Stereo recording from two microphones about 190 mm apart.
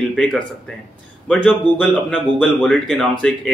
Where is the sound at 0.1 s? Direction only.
Centre (ahead or behind).